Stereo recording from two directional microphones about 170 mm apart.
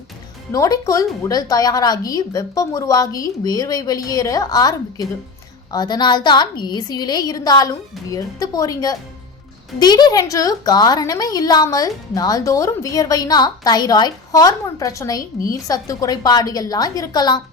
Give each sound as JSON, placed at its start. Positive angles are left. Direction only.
{"t": 0.5, "sound": "a woman's voice", "side_deg": 20}